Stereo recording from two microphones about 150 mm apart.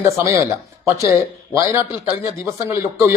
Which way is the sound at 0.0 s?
20° right (ahead or behind).